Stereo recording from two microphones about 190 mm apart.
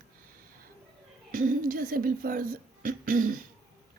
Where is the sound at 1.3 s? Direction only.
45° right (ahead or behind).